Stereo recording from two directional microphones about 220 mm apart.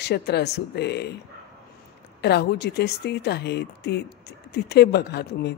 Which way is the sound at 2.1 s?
50° left (ahead or behind).